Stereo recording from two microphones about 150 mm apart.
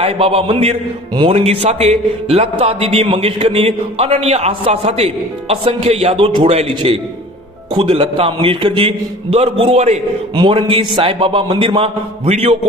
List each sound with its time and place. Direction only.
0.0 s a man's voice: 40° right (ahead or behind)
10.3 s a man's voice: 35° right (ahead or behind)